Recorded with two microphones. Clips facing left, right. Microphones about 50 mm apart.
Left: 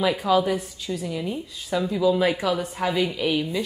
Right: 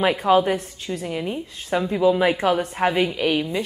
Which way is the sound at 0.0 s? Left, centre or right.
Right.